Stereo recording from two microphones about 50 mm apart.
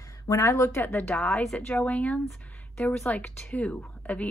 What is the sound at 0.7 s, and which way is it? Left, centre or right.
Speech, left.